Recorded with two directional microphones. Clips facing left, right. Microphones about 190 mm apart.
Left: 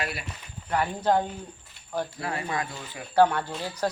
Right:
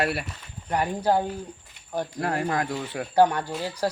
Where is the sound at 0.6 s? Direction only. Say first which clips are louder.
Right 1 dB; 15° right (ahead or behind).